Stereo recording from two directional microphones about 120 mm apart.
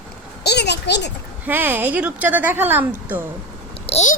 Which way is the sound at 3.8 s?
65° left (ahead or behind).